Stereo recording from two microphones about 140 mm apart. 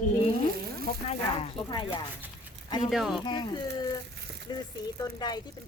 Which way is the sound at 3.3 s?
35° left (ahead or behind).